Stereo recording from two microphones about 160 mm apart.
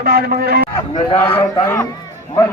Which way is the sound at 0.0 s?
75° right (ahead or behind).